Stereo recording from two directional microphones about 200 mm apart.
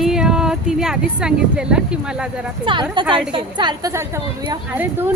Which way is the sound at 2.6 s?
25° right (ahead or behind).